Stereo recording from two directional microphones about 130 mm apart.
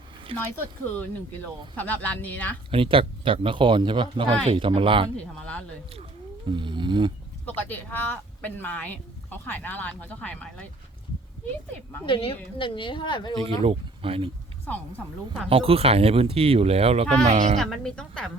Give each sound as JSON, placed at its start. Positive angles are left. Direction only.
{"t": 0.3, "sound": "speech", "side_deg": -45}
{"t": 0.9, "sound": "speech", "side_deg": 10}
{"t": 2.6, "sound": "speech", "side_deg": -45}
{"t": 5.1, "sound": "speech", "side_deg": 10}
{"t": 5.9, "sound": "speech", "side_deg": -40}
{"t": 7.4, "sound": "speech", "side_deg": 15}
{"t": 12.0, "sound": "speech", "side_deg": 45}
{"t": 13.6, "sound": "speech", "side_deg": -45}
{"t": 15.4, "sound": "a woman's voice", "side_deg": -45}
{"t": 17.6, "sound": "a woman's voice", "side_deg": 5}